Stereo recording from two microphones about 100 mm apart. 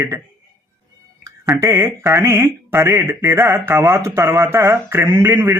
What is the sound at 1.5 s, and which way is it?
Speech, 25° right (ahead or behind).